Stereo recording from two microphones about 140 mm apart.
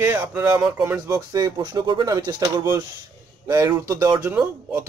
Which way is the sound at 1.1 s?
25° right (ahead or behind).